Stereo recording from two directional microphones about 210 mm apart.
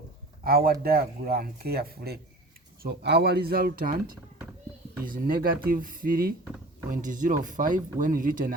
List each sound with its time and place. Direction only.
0.4 s speech: 45° right (ahead or behind)